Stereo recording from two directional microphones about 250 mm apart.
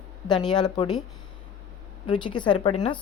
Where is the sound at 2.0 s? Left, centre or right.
Centre.